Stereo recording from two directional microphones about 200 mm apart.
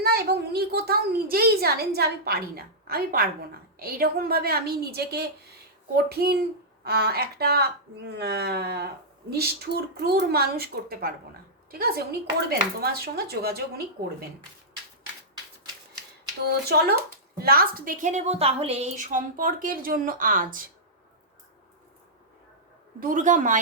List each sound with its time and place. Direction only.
0.0 s a child's voice: 50° right (ahead or behind)
16.5 s speech: 55° right (ahead or behind)
23.0 s a woman's voice: 40° right (ahead or behind)